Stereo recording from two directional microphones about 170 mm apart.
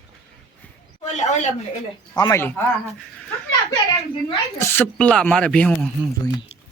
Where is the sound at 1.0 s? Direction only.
45° left (ahead or behind).